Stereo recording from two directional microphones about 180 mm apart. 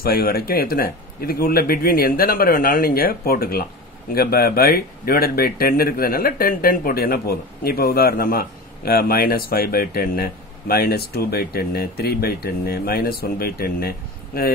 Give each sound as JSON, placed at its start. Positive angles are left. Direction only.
{"t": 0.0, "sound": "speech", "side_deg": 55}